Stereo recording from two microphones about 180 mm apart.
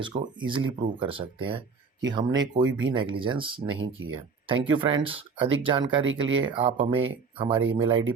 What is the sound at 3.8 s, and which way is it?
Speech, 90° right.